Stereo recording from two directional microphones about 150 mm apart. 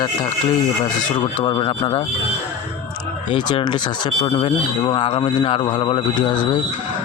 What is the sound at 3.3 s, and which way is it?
Speech, 30° left (ahead or behind).